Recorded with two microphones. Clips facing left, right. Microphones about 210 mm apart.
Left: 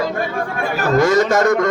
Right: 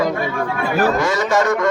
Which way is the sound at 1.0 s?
40° left (ahead or behind).